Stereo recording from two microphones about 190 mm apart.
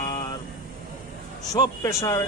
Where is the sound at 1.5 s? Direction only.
20° left (ahead or behind).